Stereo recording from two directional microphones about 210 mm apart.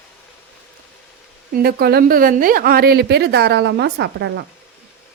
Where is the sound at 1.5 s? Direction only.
45° right (ahead or behind).